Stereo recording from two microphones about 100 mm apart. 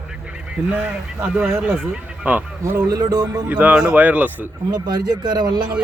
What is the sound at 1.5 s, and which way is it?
Speech, 15° right (ahead or behind).